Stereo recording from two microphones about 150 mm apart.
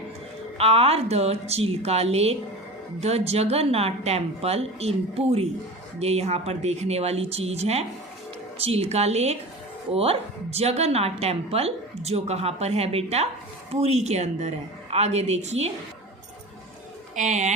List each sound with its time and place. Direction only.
0.6 s a woman's voice: 40° right (ahead or behind)
17.2 s a woman's voice: 55° right (ahead or behind)